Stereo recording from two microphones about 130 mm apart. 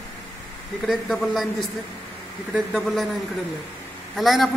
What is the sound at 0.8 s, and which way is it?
A man's voice, centre (ahead or behind).